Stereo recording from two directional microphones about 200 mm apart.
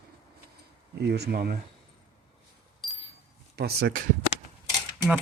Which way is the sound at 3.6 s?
55° right (ahead or behind).